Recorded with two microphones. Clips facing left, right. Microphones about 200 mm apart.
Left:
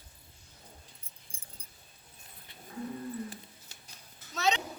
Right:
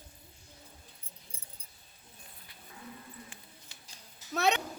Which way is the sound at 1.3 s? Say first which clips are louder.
Right 1 dB; 45° left (ahead or behind).